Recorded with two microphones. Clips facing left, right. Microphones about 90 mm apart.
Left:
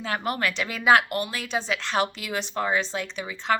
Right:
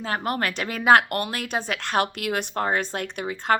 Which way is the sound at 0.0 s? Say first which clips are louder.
Right 1 dB; 40° right (ahead or behind).